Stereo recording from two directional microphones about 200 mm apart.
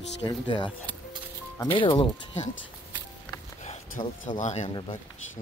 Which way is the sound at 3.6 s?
40° left (ahead or behind).